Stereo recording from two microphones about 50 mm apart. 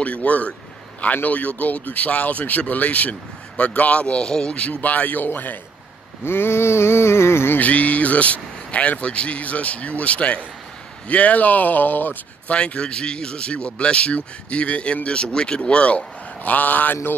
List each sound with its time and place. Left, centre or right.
0.0 s a man's voice: left
6.2 s a sound: left
7.5 s a man's voice: left
12.4 s a man's voice: left
16.4 s speech: left